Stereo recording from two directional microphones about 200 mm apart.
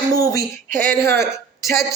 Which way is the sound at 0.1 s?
15° left (ahead or behind).